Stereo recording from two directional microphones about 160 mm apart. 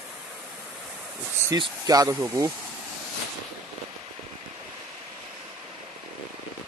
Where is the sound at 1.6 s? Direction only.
20° right (ahead or behind).